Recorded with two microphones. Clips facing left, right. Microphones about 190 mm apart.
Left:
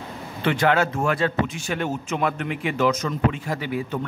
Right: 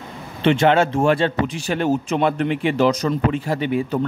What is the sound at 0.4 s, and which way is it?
Speech, 25° right (ahead or behind).